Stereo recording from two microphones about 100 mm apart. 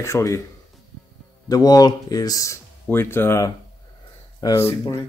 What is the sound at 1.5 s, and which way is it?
Speech, 40° left (ahead or behind).